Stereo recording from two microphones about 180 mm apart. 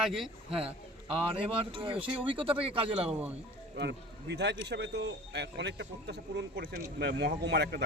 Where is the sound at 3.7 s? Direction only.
75° right (ahead or behind).